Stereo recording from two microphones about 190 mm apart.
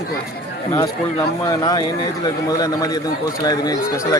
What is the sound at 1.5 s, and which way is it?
Speech, 20° left (ahead or behind).